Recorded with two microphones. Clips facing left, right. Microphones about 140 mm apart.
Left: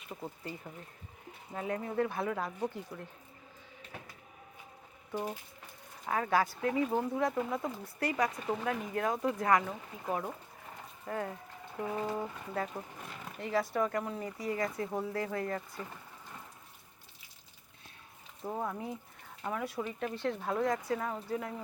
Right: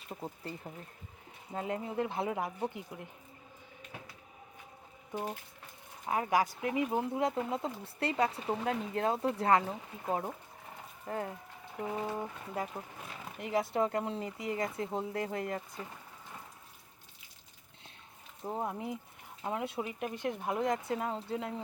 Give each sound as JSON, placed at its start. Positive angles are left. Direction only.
{"t": 0.1, "sound": "speech", "side_deg": -15}
{"t": 1.5, "sound": "speech", "side_deg": -25}
{"t": 6.1, "sound": "speech", "side_deg": -20}
{"t": 11.8, "sound": "speech", "side_deg": -15}
{"t": 13.4, "sound": "speech", "side_deg": -20}
{"t": 18.4, "sound": "speech", "side_deg": -20}